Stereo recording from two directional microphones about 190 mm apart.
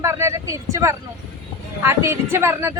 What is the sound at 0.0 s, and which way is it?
Speech, 15° right (ahead or behind).